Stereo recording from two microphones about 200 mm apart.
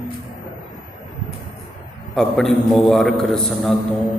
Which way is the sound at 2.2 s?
5° left (ahead or behind).